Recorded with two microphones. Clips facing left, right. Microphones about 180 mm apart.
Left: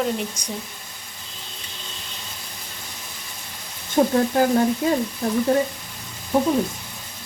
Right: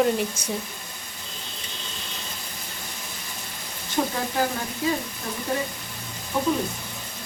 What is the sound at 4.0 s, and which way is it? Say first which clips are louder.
Frying: left 7 dB; 40° left (ahead or behind).